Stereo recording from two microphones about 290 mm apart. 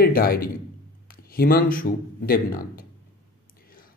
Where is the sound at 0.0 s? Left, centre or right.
Left.